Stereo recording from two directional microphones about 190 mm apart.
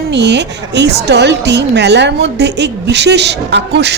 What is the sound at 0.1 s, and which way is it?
A woman's voice, 65° right (ahead or behind).